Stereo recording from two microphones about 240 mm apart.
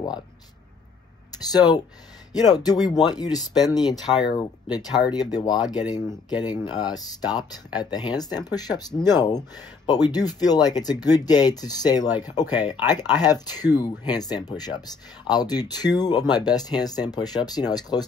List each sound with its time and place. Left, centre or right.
1.5 s speech: centre